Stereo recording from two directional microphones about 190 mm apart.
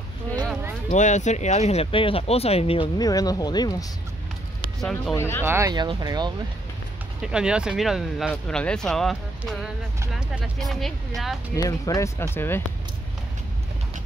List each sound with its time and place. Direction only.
0.3 s a sound: 10° left (ahead or behind)
0.9 s speech: 40° left (ahead or behind); by 3.7 s 20° left (ahead or behind)
5.1 s speech: 15° left (ahead or behind)
5.4 s speech: 15° right (ahead or behind)
7.2 s speech: 5° right (ahead or behind)
11.5 s speech: 20° left (ahead or behind)